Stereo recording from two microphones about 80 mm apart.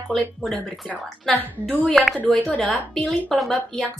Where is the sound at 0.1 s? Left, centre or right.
Centre.